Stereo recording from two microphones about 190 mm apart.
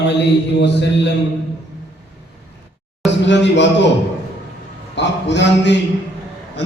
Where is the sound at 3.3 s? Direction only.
70° left (ahead or behind).